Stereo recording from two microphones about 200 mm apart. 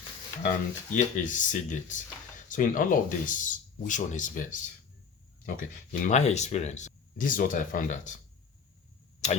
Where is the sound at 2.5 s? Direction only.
45° left (ahead or behind).